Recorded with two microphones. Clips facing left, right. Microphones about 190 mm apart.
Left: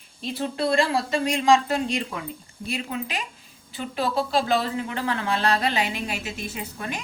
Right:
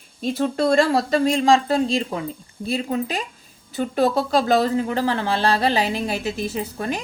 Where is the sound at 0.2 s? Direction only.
45° right (ahead or behind).